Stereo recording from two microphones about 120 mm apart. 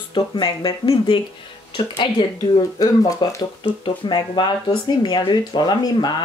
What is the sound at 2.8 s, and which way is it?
Speech, 30° left (ahead or behind).